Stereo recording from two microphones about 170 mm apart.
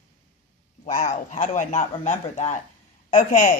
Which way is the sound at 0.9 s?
50° left (ahead or behind).